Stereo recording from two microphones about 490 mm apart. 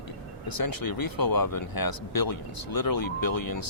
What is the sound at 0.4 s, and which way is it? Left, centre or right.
Speech, left.